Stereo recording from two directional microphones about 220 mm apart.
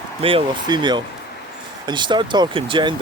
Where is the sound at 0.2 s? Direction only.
25° right (ahead or behind).